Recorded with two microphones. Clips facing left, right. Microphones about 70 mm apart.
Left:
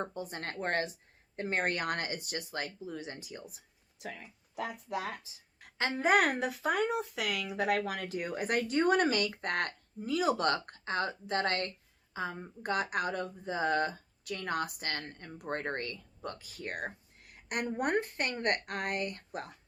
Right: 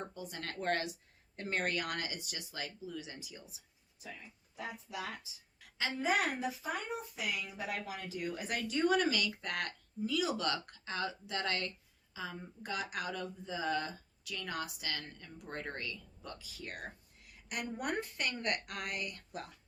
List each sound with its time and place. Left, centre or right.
0.0 s speech: left
4.0 s speech: left
4.9 s speech: left